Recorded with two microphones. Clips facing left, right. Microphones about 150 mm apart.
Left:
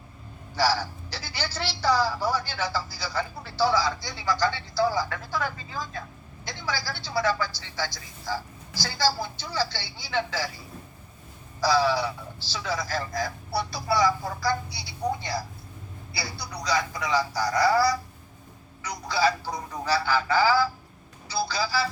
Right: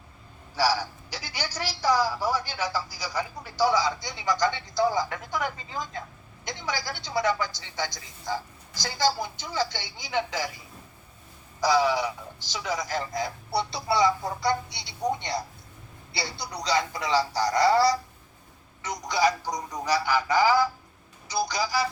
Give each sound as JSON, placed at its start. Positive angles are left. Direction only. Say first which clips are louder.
{"t": 0.5, "sound": "a woman's voice", "louder": "even", "side_deg": -10}
{"t": 11.6, "sound": "a woman's voice", "louder": "even", "side_deg": -15}